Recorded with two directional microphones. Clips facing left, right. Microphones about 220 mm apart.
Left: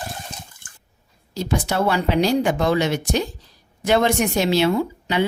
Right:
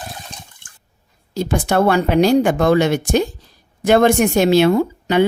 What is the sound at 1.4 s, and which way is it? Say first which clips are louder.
Speech: right 5 dB; 55° right (ahead or behind).